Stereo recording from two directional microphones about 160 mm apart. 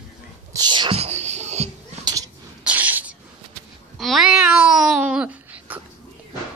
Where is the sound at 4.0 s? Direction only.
Centre (ahead or behind).